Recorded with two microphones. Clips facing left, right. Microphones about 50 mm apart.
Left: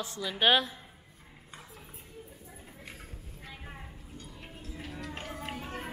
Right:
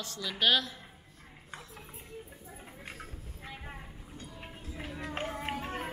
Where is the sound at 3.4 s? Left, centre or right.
Centre.